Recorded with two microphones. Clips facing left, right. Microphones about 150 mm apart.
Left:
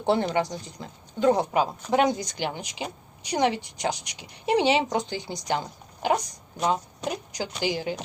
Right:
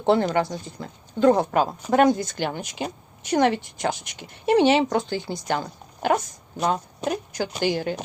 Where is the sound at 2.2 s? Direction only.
15° left (ahead or behind).